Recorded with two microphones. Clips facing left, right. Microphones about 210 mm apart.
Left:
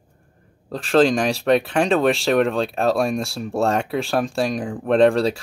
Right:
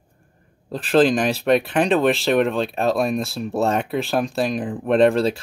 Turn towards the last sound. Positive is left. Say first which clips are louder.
# even
turn(degrees=0)  # may be behind; listen again after turning